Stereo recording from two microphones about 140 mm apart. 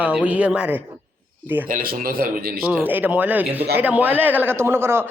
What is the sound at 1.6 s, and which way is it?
Speech, 85° right.